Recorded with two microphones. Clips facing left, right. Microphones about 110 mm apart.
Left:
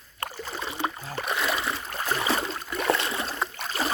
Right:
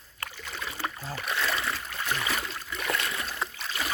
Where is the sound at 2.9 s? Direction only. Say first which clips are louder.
Left 5 dB; 25° left (ahead or behind).